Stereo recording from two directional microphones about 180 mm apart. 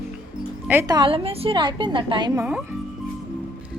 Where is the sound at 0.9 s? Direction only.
30° right (ahead or behind).